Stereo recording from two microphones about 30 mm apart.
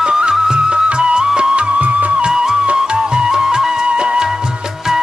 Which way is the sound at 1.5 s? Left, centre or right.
Right.